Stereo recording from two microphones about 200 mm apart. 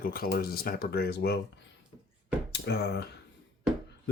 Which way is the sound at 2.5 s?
55° left (ahead or behind).